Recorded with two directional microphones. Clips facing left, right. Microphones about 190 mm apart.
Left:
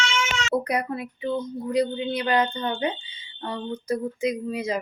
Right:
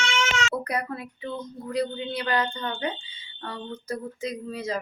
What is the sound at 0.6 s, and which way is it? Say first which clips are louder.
Speech: left 3 dB; 20° left (ahead or behind).